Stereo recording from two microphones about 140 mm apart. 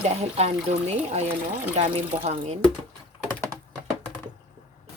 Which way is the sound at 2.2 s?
50° right (ahead or behind).